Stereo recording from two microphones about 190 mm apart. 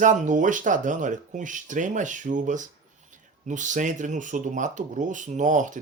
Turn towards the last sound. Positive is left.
turn(degrees=-40)  # may be behind; listen again after turning